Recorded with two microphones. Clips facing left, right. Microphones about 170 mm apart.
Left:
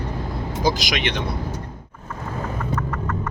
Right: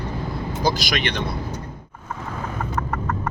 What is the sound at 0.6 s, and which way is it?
Speech, 15° left (ahead or behind).